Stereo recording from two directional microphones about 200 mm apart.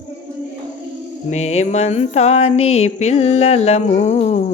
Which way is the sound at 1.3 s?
35° left (ahead or behind).